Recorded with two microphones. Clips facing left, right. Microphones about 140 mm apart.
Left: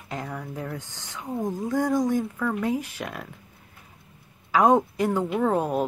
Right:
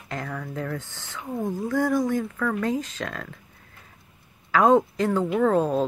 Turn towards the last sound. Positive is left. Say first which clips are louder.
# right 3 dB
turn(degrees=15)  # may be behind; listen again after turning